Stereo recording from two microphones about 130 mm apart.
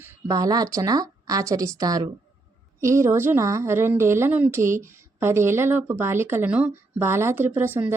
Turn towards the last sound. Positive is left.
turn(degrees=-15)  # may be behind; listen again after turning